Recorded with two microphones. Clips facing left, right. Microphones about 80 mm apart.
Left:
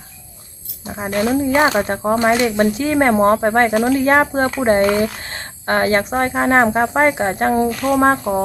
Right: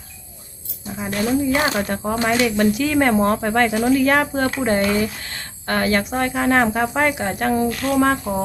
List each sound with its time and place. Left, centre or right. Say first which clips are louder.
0.9 s a woman's voice: left 3 dB; left
1.7 s a woman's voice: left 5 dB; left